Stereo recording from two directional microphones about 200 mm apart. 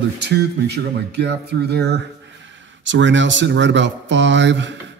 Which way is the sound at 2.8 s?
65° right (ahead or behind).